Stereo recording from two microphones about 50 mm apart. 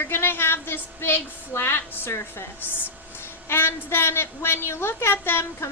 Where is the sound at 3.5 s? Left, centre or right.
Left.